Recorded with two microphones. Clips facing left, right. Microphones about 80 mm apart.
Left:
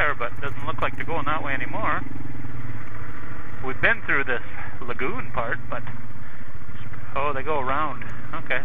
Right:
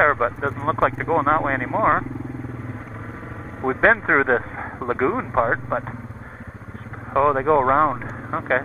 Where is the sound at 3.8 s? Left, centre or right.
Right.